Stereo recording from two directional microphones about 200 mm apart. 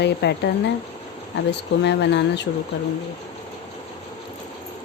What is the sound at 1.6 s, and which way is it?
Speech, 60° left (ahead or behind).